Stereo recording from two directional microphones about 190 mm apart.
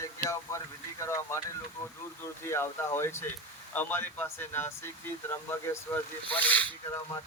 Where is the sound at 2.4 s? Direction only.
15° left (ahead or behind).